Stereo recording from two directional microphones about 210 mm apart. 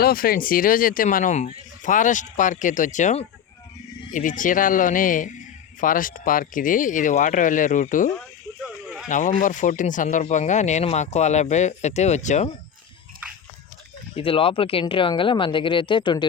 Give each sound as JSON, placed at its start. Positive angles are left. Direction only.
{"t": 0.0, "sound": "speech", "side_deg": 45}
{"t": 8.6, "sound": "snake", "side_deg": -5}
{"t": 9.0, "sound": "speech", "side_deg": 35}
{"t": 14.2, "sound": "speech", "side_deg": 25}